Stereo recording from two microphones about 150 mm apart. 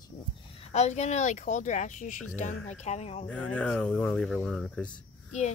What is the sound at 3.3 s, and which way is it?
Speech, 10° left (ahead or behind).